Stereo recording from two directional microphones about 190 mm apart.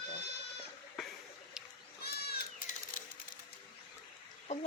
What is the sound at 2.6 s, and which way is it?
Bird, 45° left (ahead or behind).